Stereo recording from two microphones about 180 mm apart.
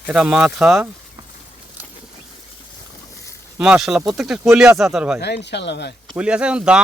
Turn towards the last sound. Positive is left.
turn(degrees=-5)  # may be behind; listen again after turning